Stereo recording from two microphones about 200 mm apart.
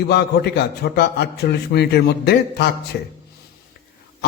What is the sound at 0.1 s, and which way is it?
A man's voice, 55° left (ahead or behind).